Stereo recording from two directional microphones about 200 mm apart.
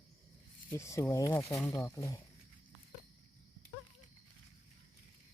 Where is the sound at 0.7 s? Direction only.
15° left (ahead or behind).